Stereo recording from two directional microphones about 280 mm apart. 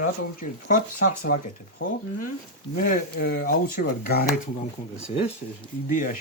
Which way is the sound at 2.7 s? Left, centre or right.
Left.